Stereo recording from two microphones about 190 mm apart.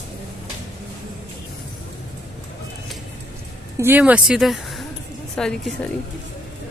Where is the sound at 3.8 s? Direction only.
10° right (ahead or behind).